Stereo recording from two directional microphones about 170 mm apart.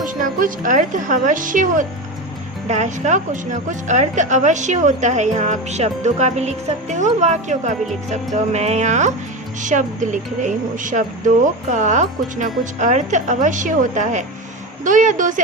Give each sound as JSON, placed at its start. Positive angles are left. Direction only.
{"t": 0.0, "sound": "a woman's voice", "side_deg": -50}